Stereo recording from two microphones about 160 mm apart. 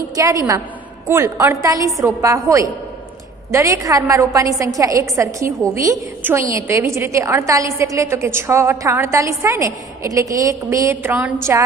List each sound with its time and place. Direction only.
0.1 s a woman's voice: 20° right (ahead or behind)